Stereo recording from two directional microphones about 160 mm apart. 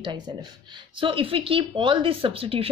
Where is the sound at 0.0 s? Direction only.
25° right (ahead or behind).